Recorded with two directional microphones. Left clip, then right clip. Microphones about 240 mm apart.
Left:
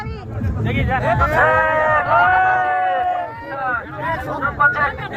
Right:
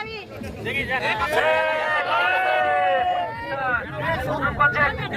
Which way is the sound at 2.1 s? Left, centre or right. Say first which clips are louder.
Left 6 dB; left.